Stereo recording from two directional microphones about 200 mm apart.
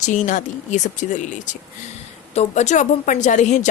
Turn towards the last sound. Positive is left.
turn(degrees=35)  # may be behind; listen again after turning